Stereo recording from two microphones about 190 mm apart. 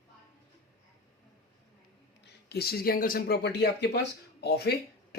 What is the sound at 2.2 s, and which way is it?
Speech, 60° left (ahead or behind).